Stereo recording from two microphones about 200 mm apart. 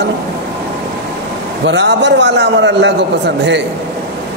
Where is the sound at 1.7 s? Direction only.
60° right (ahead or behind).